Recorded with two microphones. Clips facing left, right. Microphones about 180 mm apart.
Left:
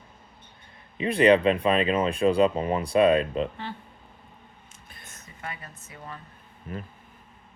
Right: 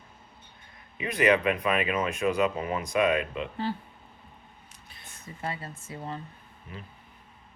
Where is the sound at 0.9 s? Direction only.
30° left (ahead or behind).